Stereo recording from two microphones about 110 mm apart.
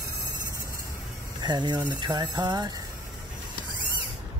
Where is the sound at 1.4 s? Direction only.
40° right (ahead or behind).